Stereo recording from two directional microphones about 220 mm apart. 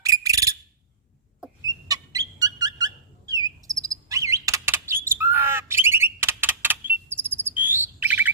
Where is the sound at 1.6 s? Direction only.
15° right (ahead or behind).